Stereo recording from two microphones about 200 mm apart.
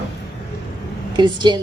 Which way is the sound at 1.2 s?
20° right (ahead or behind).